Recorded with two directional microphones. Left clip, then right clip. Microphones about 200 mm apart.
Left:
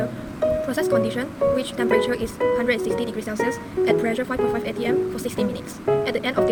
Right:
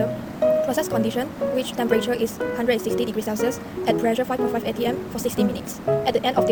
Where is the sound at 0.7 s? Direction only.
10° left (ahead or behind).